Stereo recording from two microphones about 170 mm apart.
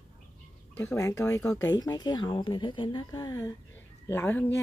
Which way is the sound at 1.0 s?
20° left (ahead or behind).